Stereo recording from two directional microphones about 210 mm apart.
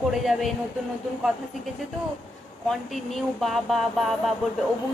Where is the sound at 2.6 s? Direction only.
Centre (ahead or behind).